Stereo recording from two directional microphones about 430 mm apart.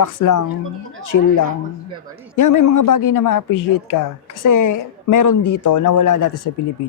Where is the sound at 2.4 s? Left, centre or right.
Left.